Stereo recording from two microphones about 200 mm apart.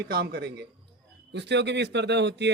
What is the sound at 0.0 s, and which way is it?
Speech, 50° right (ahead or behind).